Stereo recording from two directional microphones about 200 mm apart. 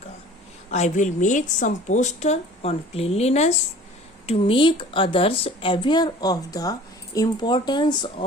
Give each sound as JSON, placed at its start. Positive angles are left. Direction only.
{"t": 0.7, "sound": "a woman's voice", "side_deg": 35}